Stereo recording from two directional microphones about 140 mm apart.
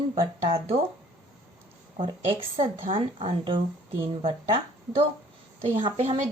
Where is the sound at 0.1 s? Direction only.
40° right (ahead or behind).